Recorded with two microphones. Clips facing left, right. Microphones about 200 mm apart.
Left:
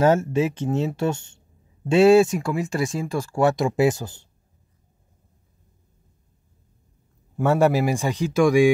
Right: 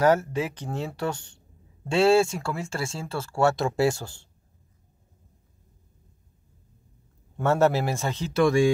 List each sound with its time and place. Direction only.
0.0 s speech: 25° left (ahead or behind)
7.3 s speech: 15° left (ahead or behind)